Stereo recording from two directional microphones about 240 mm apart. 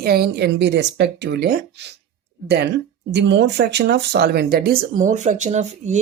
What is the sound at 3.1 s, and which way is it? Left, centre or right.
Speech, right.